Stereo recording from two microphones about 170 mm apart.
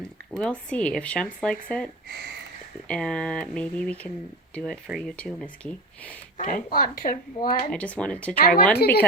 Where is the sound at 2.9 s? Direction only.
5° left (ahead or behind).